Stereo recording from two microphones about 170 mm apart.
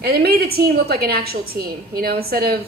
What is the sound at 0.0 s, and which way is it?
A woman's voice, 65° right (ahead or behind).